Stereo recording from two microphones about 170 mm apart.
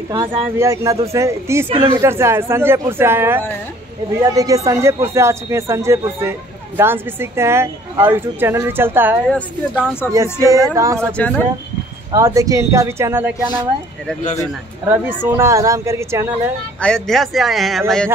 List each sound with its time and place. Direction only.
0.1 s a sound: 25° right (ahead or behind)
1.1 s speech: 15° right (ahead or behind)
4.2 s a sound: 20° right (ahead or behind)
5.1 s speech: 15° right (ahead or behind)
9.3 s speech: 10° left (ahead or behind)
10.1 s a sound: 20° right (ahead or behind)
11.1 s speech: 10° left (ahead or behind)
12.1 s speech: 20° right (ahead or behind)
14.9 s speech: 15° right (ahead or behind)
16.8 s speech: 5° left (ahead or behind)